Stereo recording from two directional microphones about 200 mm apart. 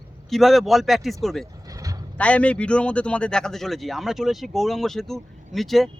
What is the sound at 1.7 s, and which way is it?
Vehicle, 15° right (ahead or behind).